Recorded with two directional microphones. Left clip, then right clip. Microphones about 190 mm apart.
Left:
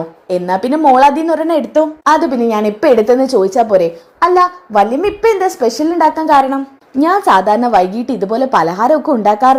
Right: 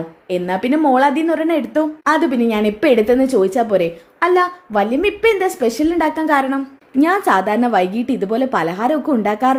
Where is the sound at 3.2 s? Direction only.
25° right (ahead or behind).